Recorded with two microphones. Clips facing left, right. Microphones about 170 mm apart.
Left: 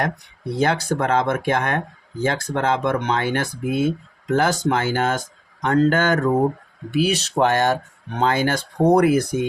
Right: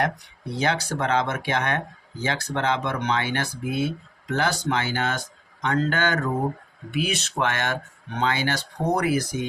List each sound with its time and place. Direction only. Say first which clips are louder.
0.6 s speech: left 5 dB; 50° left (ahead or behind)